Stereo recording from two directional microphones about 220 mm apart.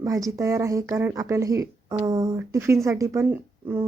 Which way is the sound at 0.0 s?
15° right (ahead or behind).